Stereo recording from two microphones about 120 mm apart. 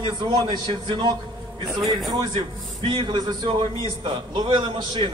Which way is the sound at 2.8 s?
45° right (ahead or behind).